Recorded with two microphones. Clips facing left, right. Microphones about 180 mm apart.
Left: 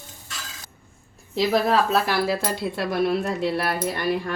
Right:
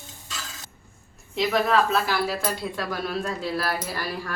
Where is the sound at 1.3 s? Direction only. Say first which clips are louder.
Left 2 dB; 35° left (ahead or behind).